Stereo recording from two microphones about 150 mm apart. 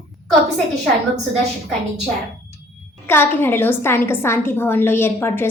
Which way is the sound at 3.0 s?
15° left (ahead or behind).